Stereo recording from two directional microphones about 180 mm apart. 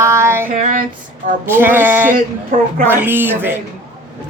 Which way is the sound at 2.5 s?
55° right (ahead or behind).